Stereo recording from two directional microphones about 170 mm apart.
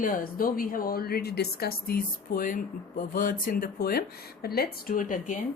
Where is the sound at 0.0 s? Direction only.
55° left (ahead or behind).